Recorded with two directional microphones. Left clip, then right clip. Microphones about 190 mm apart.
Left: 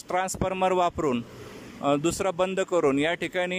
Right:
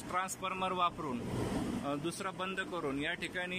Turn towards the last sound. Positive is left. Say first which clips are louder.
# left 11 dB
turn(degrees=35)  # may be behind; listen again after turning